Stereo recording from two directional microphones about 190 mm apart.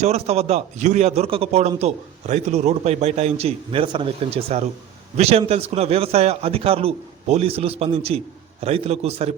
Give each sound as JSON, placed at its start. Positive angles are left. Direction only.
{"t": 0.0, "sound": "a man's voice", "side_deg": -35}